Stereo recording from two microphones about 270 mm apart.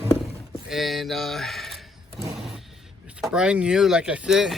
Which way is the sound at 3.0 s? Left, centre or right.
Centre.